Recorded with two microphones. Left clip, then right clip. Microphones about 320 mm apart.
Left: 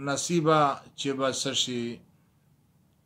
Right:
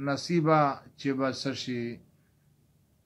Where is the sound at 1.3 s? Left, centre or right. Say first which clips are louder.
Left 5 dB; centre.